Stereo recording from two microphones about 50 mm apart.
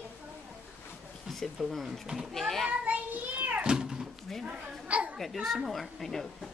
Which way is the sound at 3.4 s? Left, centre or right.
Right.